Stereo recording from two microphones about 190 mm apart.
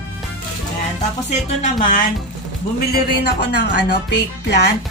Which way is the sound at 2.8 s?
55° left (ahead or behind).